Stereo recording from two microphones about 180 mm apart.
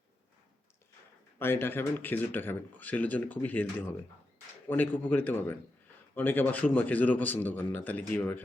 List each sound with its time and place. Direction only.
1.4 s speech: 10° left (ahead or behind)